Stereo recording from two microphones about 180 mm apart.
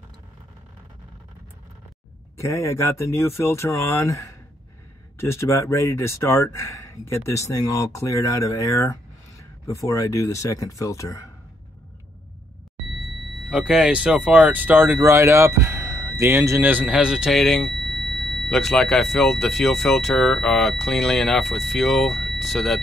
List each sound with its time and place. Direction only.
2.3 s speech: 15° left (ahead or behind)
13.4 s speech: 5° right (ahead or behind)